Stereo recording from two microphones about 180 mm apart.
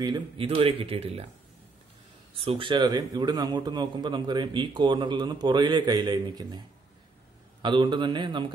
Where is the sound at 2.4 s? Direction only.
30° right (ahead or behind).